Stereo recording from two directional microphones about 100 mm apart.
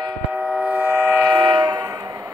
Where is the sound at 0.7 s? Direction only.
20° right (ahead or behind).